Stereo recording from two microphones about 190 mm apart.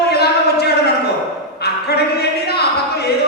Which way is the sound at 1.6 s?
60° left (ahead or behind).